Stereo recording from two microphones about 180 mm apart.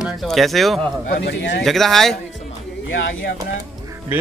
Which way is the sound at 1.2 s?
75° left (ahead or behind).